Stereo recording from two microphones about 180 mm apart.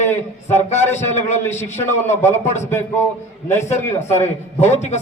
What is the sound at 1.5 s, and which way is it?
Speech, 40° left (ahead or behind).